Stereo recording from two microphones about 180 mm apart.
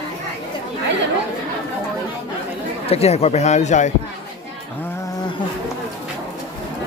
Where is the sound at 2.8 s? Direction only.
35° left (ahead or behind).